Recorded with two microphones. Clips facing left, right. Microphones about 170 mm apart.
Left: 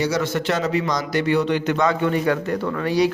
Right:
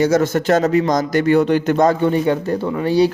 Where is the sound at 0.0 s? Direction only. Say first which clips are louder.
Right 6 dB; 45° right (ahead or behind); by 3.1 s 30° right (ahead or behind).